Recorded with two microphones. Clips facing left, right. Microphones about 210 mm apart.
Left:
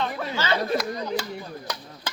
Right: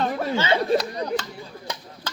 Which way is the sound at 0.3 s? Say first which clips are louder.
Right 3 dB; 25° right (ahead or behind).